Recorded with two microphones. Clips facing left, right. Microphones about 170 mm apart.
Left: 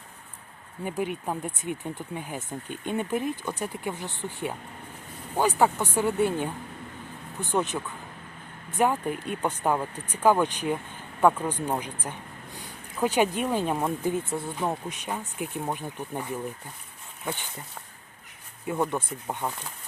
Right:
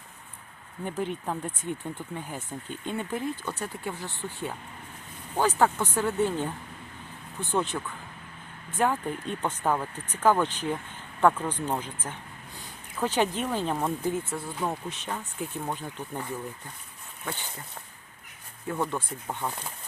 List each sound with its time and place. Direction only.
0.9 s speech: 10° left (ahead or behind)
7.5 s speech: 15° left (ahead or behind)
8.8 s speech: 15° left (ahead or behind)
18.7 s speech: 15° left (ahead or behind)